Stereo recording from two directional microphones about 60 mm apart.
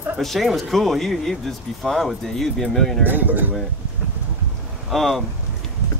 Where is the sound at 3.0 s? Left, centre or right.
Right.